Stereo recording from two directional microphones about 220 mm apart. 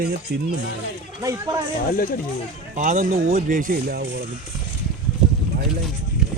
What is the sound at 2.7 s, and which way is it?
Speech, 35° right (ahead or behind).